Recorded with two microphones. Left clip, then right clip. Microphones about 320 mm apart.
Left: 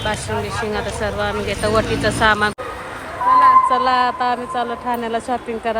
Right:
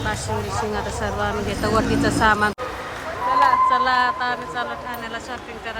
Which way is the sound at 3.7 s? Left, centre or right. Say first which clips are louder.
Left 2 dB; centre.